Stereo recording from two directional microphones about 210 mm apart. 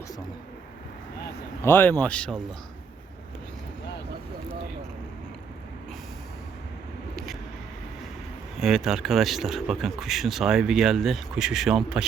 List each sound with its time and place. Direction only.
1.6 s speech: 10° left (ahead or behind)
8.5 s speech: centre (ahead or behind)